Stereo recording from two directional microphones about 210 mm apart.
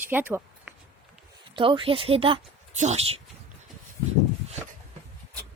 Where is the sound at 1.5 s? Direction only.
25° right (ahead or behind).